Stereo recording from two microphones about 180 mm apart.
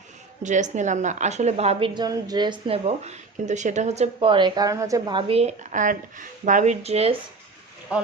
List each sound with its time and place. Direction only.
0.4 s a woman's voice: 40° right (ahead or behind)
7.9 s speech: 5° right (ahead or behind)